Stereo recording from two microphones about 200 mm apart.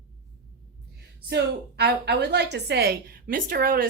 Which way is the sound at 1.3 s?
55° right (ahead or behind).